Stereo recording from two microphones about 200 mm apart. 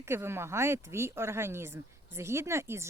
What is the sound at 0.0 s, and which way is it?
Speech, 15° right (ahead or behind).